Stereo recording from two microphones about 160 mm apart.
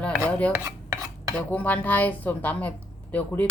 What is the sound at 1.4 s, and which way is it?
Speech, 10° left (ahead or behind).